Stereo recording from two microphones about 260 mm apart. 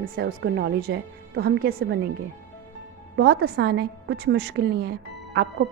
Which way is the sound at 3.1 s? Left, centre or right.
Right.